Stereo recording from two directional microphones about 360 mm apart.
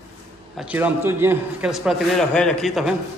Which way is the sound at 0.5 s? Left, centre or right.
Centre.